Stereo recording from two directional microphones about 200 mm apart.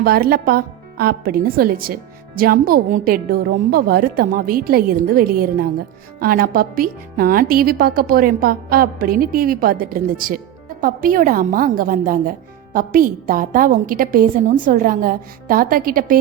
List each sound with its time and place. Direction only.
0.0 s a woman's voice: 50° right (ahead or behind)